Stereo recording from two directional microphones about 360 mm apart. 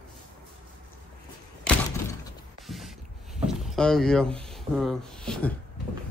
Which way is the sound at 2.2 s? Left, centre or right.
Centre.